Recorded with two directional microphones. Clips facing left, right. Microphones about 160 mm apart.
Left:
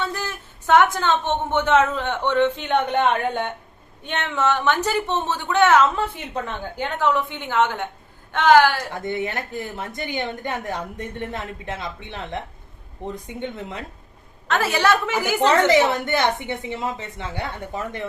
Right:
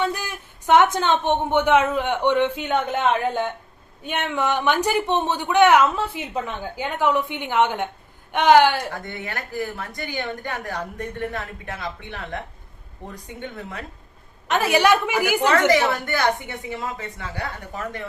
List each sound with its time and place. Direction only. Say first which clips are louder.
0.0 s a woman's voice: right 2 dB; 15° right (ahead or behind)
8.9 s speech: left 6 dB; 20° left (ahead or behind)
14.4 s speech: right 2 dB; 15° right (ahead or behind)
15.4 s speech: left 3 dB; 25° left (ahead or behind)